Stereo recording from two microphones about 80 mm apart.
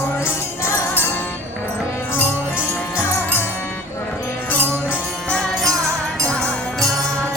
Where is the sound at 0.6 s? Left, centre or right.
Left.